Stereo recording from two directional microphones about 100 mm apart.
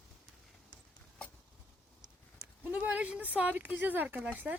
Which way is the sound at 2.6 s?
15° right (ahead or behind).